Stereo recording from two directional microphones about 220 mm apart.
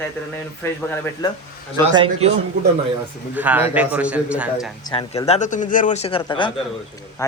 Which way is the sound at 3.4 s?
10° right (ahead or behind).